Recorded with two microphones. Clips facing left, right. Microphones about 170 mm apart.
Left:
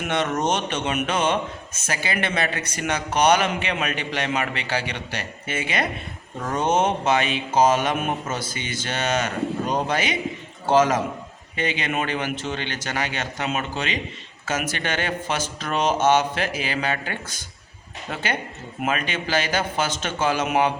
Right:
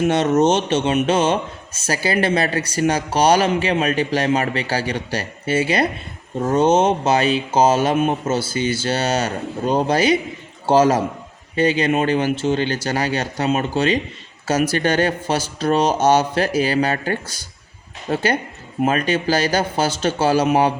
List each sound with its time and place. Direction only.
0.0 s speech: 30° right (ahead or behind)